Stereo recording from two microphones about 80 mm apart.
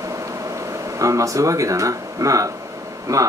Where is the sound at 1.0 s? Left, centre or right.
Right.